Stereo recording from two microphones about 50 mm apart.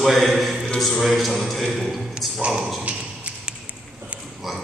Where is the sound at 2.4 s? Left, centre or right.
Centre.